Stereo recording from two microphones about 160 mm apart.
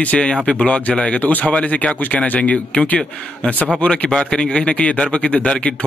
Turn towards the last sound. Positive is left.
turn(degrees=10)  # may be behind; listen again after turning